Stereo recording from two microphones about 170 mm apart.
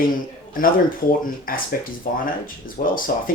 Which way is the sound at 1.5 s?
55° left (ahead or behind).